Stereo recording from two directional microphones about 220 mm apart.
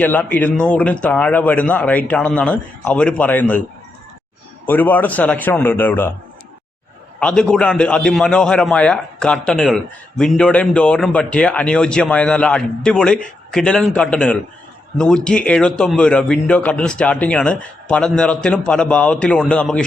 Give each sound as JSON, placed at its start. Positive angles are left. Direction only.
{"t": 0.0, "sound": "a man's voice", "side_deg": 5}
{"t": 4.6, "sound": "a man's voice", "side_deg": 10}
{"t": 7.2, "sound": "a man's voice", "side_deg": 5}